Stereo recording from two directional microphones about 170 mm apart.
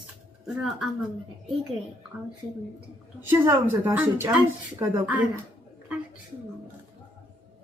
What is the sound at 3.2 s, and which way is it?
Speech, 15° right (ahead or behind).